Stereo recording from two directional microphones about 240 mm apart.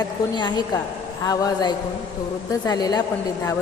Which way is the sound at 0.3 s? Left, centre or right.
Centre.